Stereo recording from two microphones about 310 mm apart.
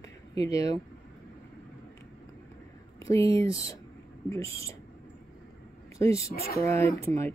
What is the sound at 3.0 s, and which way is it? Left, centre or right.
Speech, centre.